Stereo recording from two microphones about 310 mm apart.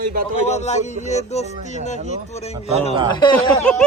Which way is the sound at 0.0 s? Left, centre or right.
Right.